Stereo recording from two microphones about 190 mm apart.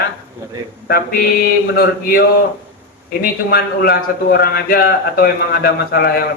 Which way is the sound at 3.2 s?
55° left (ahead or behind).